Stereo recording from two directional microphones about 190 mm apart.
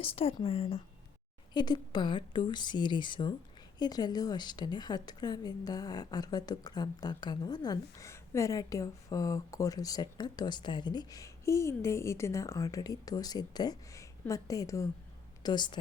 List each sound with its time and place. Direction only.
0.0 s a woman's voice: 30° left (ahead or behind)